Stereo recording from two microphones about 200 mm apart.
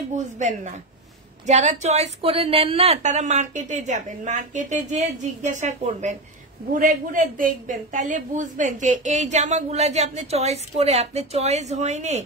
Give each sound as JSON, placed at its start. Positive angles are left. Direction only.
{"t": 0.1, "sound": "a woman's voice", "side_deg": -35}